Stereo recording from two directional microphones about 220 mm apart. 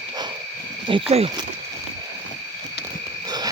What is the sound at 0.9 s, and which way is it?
Speech, 25° right (ahead or behind).